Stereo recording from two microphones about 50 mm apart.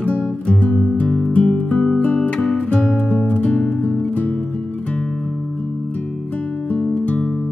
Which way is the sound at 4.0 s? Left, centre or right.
Left.